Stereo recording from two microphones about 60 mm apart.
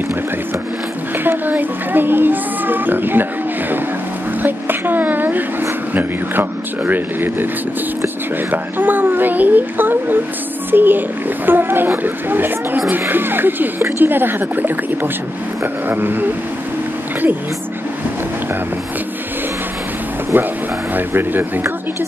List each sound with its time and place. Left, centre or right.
1.1 s speech: right
4.4 s speech: right
8.5 s speech: right
20.3 s speech: right